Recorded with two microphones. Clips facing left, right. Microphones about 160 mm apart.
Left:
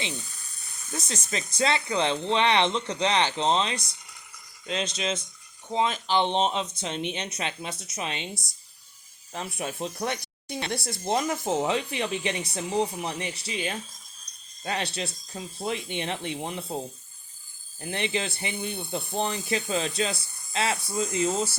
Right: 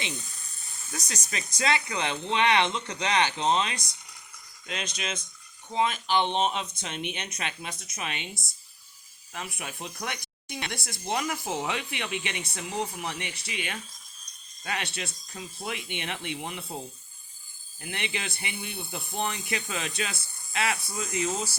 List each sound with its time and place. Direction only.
0.9 s speech: 25° left (ahead or behind)
9.3 s speech: 35° left (ahead or behind)
17.7 s speech: 35° left (ahead or behind)